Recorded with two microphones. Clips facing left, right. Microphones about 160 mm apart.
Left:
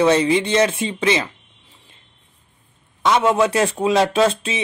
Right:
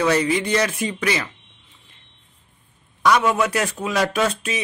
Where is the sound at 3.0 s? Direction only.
25° left (ahead or behind).